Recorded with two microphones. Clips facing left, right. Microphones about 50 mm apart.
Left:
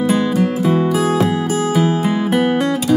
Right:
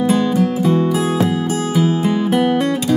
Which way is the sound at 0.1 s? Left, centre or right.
Centre.